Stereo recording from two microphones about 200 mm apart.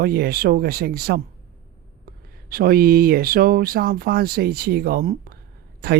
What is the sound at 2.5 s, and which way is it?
Speech, 50° right (ahead or behind).